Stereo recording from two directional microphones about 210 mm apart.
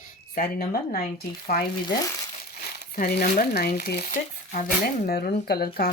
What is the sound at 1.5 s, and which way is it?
Speech, 45° left (ahead or behind).